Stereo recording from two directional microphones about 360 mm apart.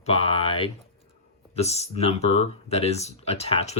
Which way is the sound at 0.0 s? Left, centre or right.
Centre.